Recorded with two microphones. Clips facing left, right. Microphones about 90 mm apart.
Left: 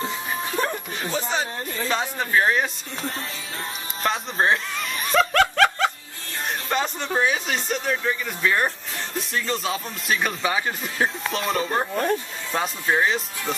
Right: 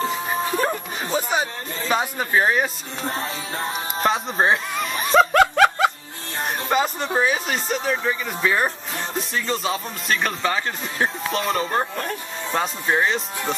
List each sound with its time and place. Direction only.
0.0 s music: 25° right (ahead or behind); by 3.1 s 5° right (ahead or behind)
3.1 s music: 35° right (ahead or behind)
4.0 s speech: centre (ahead or behind)
5.1 s snicker: 10° right (ahead or behind)
6.7 s speech: 5° right (ahead or behind)